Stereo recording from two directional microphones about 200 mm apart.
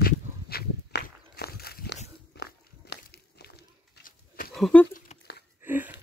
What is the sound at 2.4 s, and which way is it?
Biting, 55° left (ahead or behind).